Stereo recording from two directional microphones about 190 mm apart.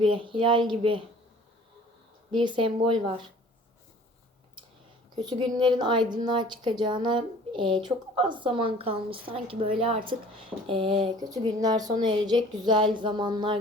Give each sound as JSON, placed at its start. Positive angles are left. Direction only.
{"t": 0.0, "sound": "a woman's voice", "side_deg": -25}
{"t": 2.3, "sound": "a woman's voice", "side_deg": -25}
{"t": 5.5, "sound": "a woman's voice", "side_deg": -25}